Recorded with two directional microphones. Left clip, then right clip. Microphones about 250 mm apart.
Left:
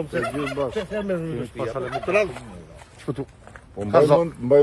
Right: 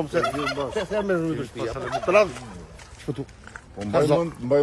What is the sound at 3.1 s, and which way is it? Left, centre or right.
Speech, centre.